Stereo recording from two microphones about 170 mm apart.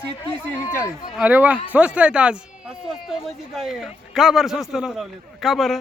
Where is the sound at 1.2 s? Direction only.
10° right (ahead or behind).